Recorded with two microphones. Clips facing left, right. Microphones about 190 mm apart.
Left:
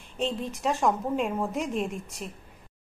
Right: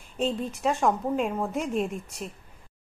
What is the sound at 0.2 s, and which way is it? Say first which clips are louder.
A woman's voice: right 2 dB; centre (ahead or behind).